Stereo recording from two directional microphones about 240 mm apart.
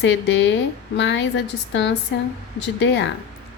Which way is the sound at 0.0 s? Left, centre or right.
Left.